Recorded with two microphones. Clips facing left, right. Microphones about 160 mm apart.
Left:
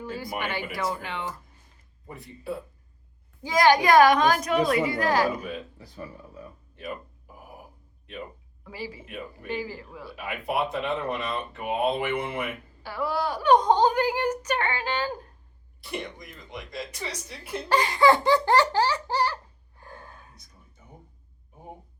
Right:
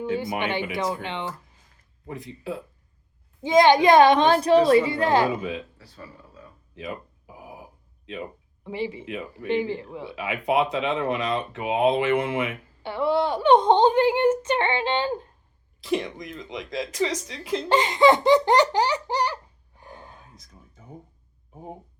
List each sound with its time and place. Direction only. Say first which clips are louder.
0.0 s a child's voice: right 6 dB; 20° right (ahead or behind)
2.0 s speech: right 2 dB; 90° right
3.4 s a child's voice: right 4 dB; 20° right (ahead or behind)
5.7 s speech: left 4 dB; 15° left (ahead or behind)
6.7 s a sound: right 2 dB; 90° right
8.6 s a child's voice: right 8 dB; 25° right (ahead or behind)
9.0 s speech: right 5 dB; 90° right
9.5 s a child's voice: right 8 dB; 25° right (ahead or behind)
10.2 s speech: right 5 dB; 90° right
12.8 s a child's voice: right 6 dB; 25° right (ahead or behind)
15.8 s speech: right 8 dB; 90° right
17.7 s laughter: right 2 dB; 20° right (ahead or behind)